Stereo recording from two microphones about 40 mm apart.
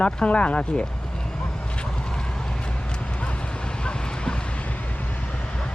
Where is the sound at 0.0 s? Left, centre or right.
Left.